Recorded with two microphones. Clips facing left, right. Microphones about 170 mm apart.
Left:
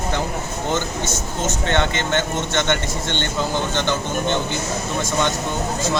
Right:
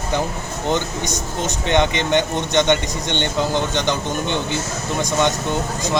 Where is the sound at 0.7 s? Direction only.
15° right (ahead or behind).